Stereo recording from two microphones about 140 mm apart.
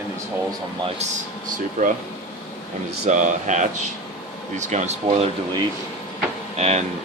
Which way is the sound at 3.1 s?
60° right (ahead or behind).